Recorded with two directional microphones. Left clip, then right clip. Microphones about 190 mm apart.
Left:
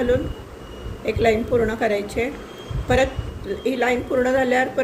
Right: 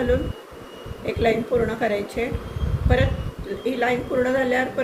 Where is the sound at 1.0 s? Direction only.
55° left (ahead or behind).